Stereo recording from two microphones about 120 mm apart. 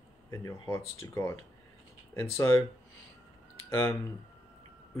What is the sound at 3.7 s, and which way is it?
Speech, 25° left (ahead or behind).